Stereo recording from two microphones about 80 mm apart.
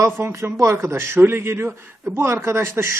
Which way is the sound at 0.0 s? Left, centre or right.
Right.